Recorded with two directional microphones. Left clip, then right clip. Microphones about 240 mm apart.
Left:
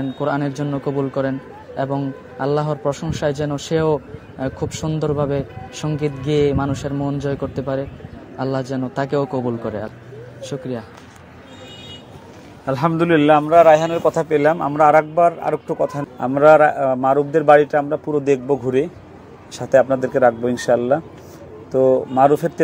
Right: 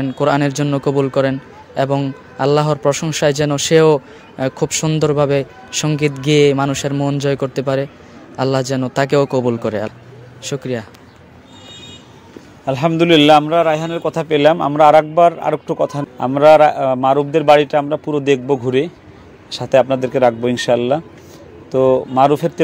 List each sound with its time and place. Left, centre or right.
0.2 s a man's voice: right
12.6 s a man's voice: right
20.0 s a man's voice: right